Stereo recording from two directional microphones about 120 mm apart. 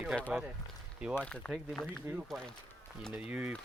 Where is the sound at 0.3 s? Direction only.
10° right (ahead or behind).